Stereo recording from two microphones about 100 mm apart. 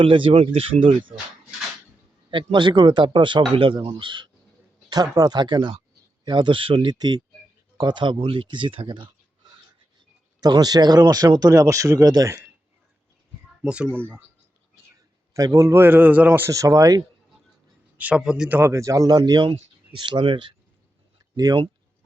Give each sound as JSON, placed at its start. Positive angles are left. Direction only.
{"t": 0.0, "sound": "speech", "side_deg": -60}
{"t": 2.3, "sound": "speech", "side_deg": -50}
{"t": 4.9, "sound": "speech", "side_deg": -40}
{"t": 8.9, "sound": "a sound", "side_deg": -50}
{"t": 10.4, "sound": "speech", "side_deg": -40}
{"t": 13.6, "sound": "a man's voice", "side_deg": -10}
{"t": 15.3, "sound": "a man's voice", "side_deg": -35}
{"t": 16.5, "sound": "speech", "side_deg": -35}
{"t": 17.9, "sound": "a man's voice", "side_deg": -15}
{"t": 18.7, "sound": "speech", "side_deg": -30}
{"t": 21.3, "sound": "speech", "side_deg": -40}